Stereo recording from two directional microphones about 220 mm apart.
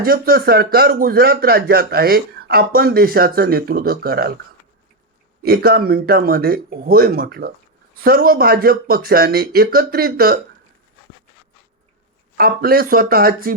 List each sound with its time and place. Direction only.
0.0 s speech: 40° right (ahead or behind)
5.5 s speech: 45° right (ahead or behind)
12.4 s speech: 40° right (ahead or behind)